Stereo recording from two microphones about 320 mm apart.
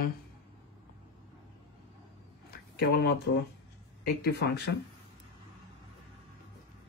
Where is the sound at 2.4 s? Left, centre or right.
Left.